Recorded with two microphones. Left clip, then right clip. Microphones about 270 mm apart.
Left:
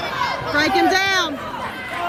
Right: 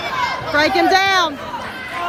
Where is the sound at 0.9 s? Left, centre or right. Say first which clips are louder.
Right 4 dB; centre.